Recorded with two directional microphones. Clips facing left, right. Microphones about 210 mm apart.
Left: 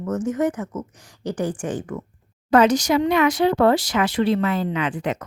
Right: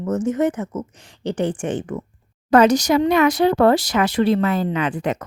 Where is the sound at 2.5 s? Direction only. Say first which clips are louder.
Right 2 dB; 40° right (ahead or behind).